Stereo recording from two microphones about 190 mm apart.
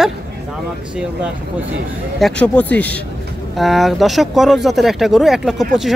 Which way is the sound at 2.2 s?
5° left (ahead or behind).